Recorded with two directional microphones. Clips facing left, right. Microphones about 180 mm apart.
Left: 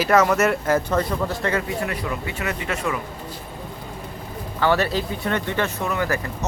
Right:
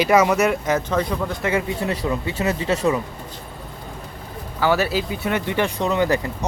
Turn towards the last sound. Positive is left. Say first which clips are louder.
# right 4 dB
turn(degrees=-20)  # may be behind; listen again after turning